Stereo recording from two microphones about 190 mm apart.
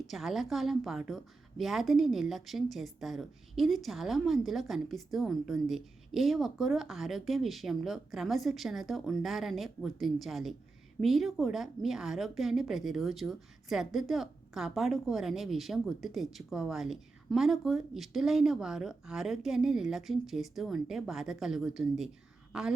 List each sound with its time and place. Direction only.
0.1 s a woman's voice: centre (ahead or behind)